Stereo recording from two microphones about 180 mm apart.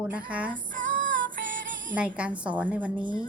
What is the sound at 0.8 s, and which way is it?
Music, 45° right (ahead or behind).